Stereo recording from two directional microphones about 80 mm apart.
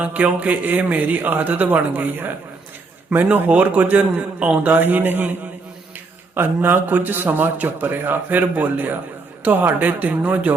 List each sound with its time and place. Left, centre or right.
0.0 s a man's voice: centre
6.3 s a man's voice: right